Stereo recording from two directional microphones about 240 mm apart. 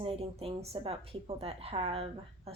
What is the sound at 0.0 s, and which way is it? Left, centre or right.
A woman's voice, right.